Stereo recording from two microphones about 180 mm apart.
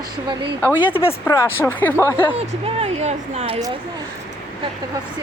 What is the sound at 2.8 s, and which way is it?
Speech, 35° right (ahead or behind).